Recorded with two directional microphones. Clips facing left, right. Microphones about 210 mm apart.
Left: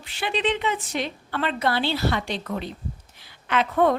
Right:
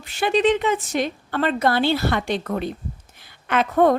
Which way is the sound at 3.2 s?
50° right (ahead or behind).